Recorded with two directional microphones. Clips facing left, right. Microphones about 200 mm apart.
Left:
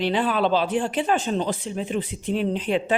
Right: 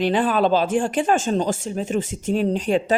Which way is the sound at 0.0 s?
45° right (ahead or behind).